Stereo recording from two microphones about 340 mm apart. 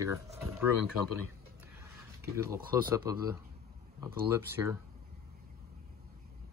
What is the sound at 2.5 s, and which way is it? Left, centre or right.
Speech, centre.